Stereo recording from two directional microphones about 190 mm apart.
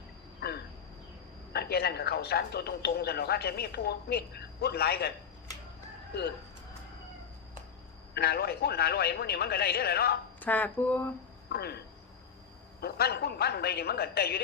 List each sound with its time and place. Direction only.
0.3 s a sound: 55° left (ahead or behind)
1.5 s speech: 55° left (ahead or behind)
6.1 s speech: 55° left (ahead or behind)
8.1 s speech: 55° left (ahead or behind)
10.4 s speech: 10° left (ahead or behind)
11.5 s speech: 55° left (ahead or behind)
12.8 s speech: 55° left (ahead or behind)